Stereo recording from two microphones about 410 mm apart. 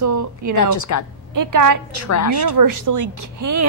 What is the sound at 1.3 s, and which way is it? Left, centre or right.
Speech, right.